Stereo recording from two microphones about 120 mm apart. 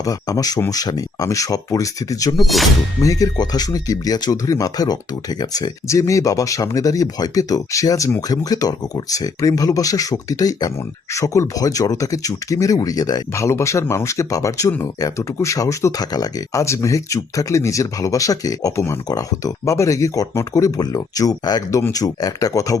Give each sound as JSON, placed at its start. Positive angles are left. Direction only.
{"t": 0.0, "sound": "speech", "side_deg": 30}